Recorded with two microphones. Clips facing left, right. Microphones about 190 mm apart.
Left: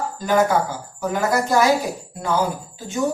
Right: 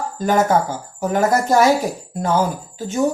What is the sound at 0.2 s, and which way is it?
Speech, 45° right (ahead or behind).